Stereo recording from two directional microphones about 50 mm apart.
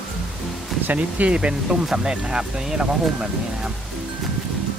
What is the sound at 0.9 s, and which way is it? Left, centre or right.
Speech, right.